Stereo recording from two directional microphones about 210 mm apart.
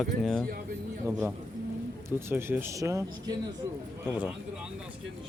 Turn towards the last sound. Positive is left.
turn(degrees=-5)  # may be behind; listen again after turning